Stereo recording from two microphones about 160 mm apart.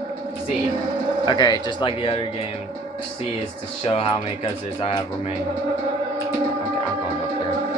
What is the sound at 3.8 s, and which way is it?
Speech, 35° left (ahead or behind).